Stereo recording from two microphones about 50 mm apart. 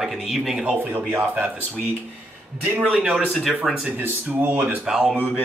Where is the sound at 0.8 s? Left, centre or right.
Right.